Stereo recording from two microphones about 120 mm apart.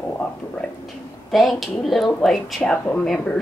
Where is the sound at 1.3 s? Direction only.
Centre (ahead or behind).